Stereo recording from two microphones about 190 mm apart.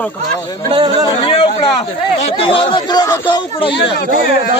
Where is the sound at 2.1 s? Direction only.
30° left (ahead or behind).